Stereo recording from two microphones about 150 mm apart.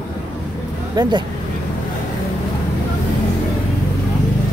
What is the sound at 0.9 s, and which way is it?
Speech, 30° right (ahead or behind).